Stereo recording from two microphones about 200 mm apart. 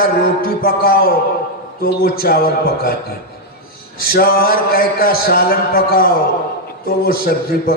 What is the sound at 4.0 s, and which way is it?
A man's voice, 50° left (ahead or behind).